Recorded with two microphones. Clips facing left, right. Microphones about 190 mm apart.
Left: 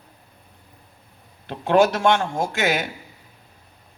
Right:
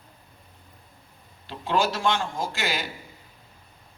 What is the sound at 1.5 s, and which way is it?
Speech, 60° left (ahead or behind).